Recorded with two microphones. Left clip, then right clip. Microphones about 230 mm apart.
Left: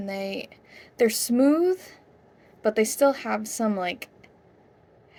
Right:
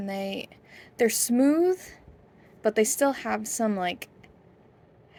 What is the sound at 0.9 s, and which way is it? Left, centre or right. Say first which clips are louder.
A woman's voice: left 2 dB; right.